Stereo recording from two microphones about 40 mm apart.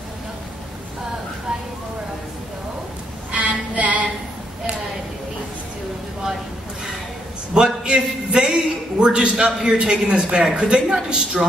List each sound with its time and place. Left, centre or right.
3.3 s music: right
7.5 s a man's voice: centre